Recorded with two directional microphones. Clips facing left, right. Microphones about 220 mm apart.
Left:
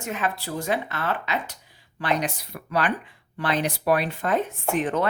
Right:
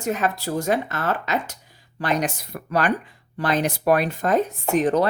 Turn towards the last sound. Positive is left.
turn(degrees=-40)  # may be behind; listen again after turning